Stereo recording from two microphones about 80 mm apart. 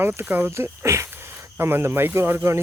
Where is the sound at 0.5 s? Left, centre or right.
Right.